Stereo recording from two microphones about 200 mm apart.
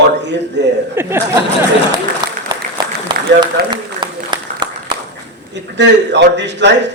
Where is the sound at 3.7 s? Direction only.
20° right (ahead or behind).